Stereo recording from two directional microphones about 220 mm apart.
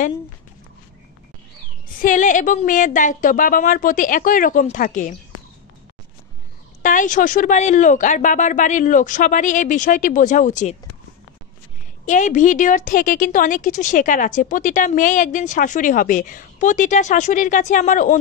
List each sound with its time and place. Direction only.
2.0 s a woman's voice: 35° left (ahead or behind)
6.8 s a woman's voice: 35° left (ahead or behind)
12.1 s a woman's voice: 35° left (ahead or behind)